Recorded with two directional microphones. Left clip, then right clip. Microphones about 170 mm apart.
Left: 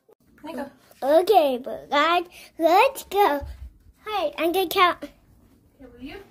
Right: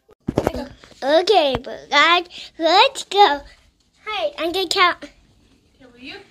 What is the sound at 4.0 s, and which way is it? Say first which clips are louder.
A child's voice: right 2 dB; 20° left (ahead or behind).